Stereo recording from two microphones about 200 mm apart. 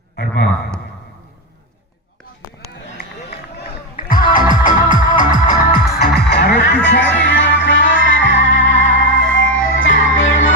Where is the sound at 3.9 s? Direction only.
45° left (ahead or behind).